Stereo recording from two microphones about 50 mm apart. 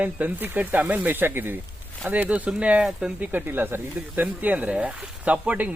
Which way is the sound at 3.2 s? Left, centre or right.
Right.